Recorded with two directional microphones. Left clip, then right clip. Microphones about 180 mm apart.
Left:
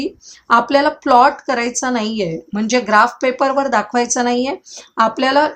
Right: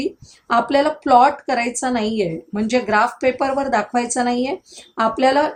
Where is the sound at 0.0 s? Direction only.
20° left (ahead or behind).